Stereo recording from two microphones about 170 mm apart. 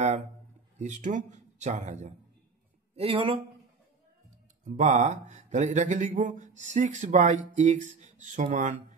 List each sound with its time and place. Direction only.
0.7 s speech: 45° right (ahead or behind)
3.0 s speech: 35° right (ahead or behind)
4.6 s speech: 45° right (ahead or behind)